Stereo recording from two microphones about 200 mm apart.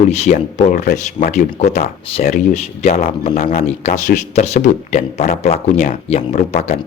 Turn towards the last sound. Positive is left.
turn(degrees=35)  # may be behind; listen again after turning